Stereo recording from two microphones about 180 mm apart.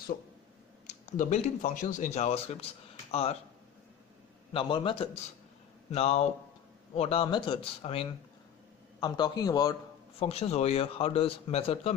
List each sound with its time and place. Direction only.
1.1 s speech: 45° left (ahead or behind)
4.5 s a man's voice: 30° left (ahead or behind)
10.2 s speech: 35° left (ahead or behind)